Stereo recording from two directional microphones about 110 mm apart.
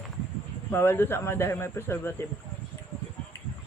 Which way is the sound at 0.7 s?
20° left (ahead or behind).